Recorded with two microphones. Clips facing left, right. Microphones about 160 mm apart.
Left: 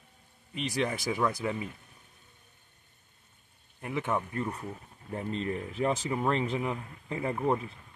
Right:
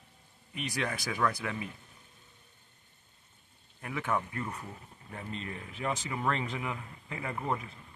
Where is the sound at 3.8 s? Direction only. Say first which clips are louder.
Left 2 dB; 25° left (ahead or behind).